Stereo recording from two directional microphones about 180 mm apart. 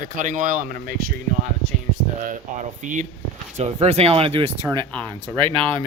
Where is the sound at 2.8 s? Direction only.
45° right (ahead or behind).